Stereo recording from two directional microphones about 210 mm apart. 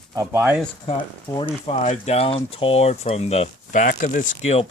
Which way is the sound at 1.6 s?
35° left (ahead or behind).